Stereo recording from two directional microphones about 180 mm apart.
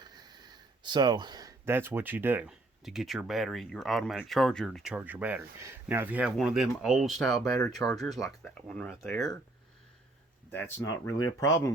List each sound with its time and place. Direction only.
0.0 s speech: 25° right (ahead or behind); by 9.0 s 5° left (ahead or behind)
10.5 s speech: 15° left (ahead or behind)